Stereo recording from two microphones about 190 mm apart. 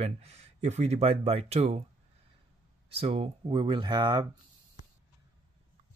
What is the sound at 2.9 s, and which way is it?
Speech, 30° right (ahead or behind).